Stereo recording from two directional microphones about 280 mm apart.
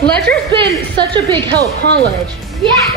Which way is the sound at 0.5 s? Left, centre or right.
Centre.